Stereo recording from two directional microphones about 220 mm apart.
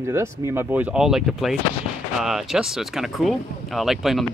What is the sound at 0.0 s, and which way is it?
Speech, 10° right (ahead or behind).